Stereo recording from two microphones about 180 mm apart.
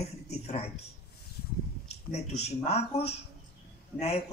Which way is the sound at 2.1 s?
40° left (ahead or behind).